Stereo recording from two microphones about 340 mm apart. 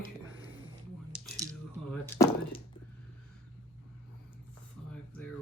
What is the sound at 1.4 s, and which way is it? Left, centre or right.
Coin, right.